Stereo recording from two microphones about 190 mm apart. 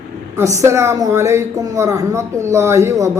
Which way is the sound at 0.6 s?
15° right (ahead or behind).